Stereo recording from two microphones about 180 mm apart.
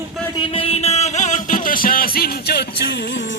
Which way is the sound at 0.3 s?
30° left (ahead or behind).